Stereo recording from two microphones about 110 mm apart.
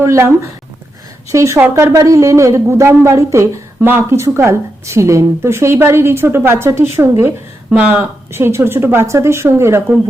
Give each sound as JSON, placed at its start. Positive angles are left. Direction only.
{"t": 0.0, "sound": "speech", "side_deg": -25}
{"t": 1.3, "sound": "speech", "side_deg": -25}